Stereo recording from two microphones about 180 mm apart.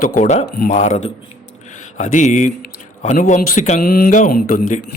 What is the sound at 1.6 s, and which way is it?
Mantra, 45° left (ahead or behind).